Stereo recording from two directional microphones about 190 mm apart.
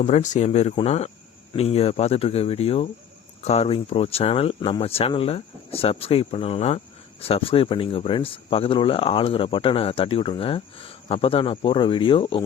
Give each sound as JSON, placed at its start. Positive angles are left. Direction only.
{"t": 0.0, "sound": "speech", "side_deg": 40}